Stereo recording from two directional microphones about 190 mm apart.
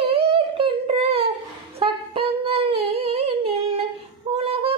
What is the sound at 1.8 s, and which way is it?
Humming, 30° right (ahead or behind).